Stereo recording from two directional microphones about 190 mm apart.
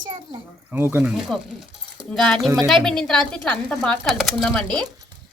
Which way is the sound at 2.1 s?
Centre (ahead or behind).